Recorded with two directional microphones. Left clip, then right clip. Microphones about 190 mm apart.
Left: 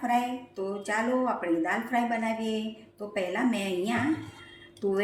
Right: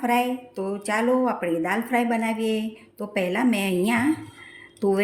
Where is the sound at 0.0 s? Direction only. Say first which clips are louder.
Right 5 dB; 50° right (ahead or behind).